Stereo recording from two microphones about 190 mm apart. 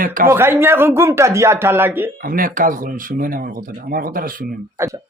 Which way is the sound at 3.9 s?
50° right (ahead or behind).